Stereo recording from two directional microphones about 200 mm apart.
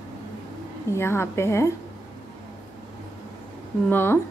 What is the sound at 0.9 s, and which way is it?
Speech, 15° left (ahead or behind).